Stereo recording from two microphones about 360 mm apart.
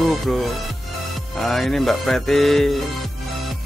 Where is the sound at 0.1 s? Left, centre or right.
Centre.